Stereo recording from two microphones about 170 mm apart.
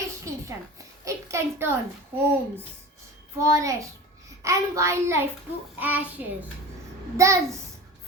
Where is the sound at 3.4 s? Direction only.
20° right (ahead or behind).